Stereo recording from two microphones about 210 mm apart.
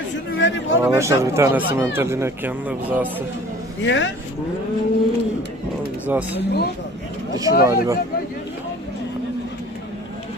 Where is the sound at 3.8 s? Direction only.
60° left (ahead or behind).